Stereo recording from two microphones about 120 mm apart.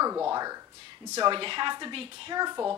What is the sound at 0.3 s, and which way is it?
Speech, 30° right (ahead or behind).